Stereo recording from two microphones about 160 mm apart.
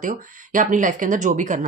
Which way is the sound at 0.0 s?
55° right (ahead or behind).